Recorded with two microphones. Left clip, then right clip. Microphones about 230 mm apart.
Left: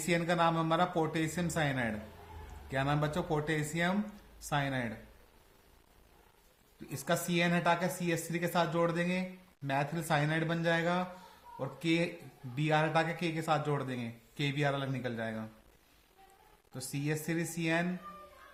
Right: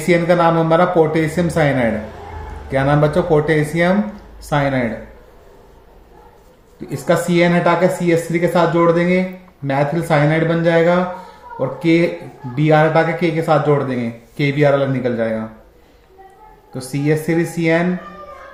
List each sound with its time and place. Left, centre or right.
0.1 s speech: left
6.9 s speech: left
16.7 s speech: left